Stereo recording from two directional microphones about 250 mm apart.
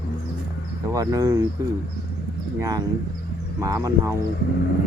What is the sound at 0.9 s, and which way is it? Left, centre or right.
Speech, centre.